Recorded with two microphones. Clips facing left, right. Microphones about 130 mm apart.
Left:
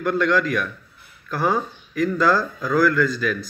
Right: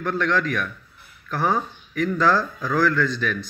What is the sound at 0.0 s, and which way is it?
Speech, 10° left (ahead or behind).